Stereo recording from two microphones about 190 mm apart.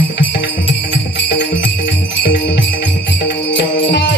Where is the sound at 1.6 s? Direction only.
70° left (ahead or behind).